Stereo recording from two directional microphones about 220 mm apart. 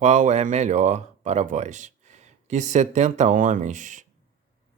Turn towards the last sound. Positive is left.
turn(degrees=-35)  # may be behind; listen again after turning